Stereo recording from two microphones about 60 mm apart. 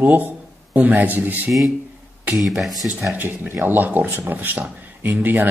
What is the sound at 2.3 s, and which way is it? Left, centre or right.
Speech, centre.